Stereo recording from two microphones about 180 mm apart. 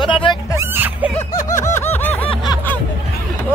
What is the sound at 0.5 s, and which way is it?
Speech, 15° right (ahead or behind).